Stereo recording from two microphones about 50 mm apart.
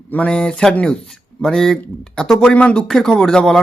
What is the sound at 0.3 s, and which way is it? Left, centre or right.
Speech, centre.